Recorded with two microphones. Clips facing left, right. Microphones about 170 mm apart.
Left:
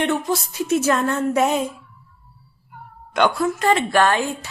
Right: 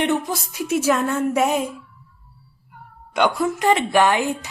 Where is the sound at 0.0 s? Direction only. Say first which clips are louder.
Even; 15° right (ahead or behind).